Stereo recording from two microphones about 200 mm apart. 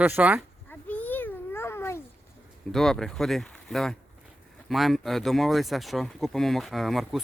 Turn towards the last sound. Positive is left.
turn(degrees=0)  # may be behind; listen again after turning